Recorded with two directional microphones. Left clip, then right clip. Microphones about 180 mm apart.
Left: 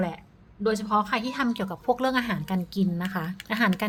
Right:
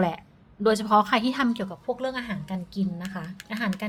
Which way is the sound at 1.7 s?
30° left (ahead or behind).